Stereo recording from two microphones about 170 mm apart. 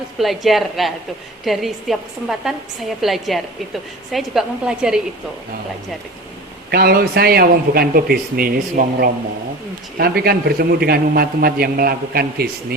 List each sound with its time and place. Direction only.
0.2 s a woman's voice: centre (ahead or behind)
3.0 s a woman's voice: centre (ahead or behind)
6.7 s a man's voice: 65° right (ahead or behind)